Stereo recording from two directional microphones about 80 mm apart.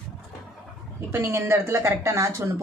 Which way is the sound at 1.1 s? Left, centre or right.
Right.